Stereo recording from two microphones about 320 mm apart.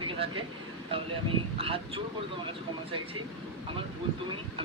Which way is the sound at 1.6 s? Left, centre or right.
Centre.